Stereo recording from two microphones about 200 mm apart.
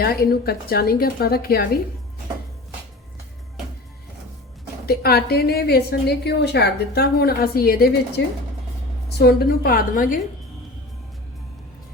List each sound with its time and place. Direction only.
0.0 s a woman's voice: 50° left (ahead or behind)
4.9 s a woman's voice: 50° left (ahead or behind)
9.1 s a woman's voice: 50° left (ahead or behind)